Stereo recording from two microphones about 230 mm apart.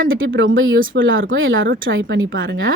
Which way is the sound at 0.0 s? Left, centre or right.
Right.